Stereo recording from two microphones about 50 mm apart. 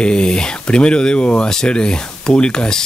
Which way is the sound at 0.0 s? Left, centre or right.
Centre.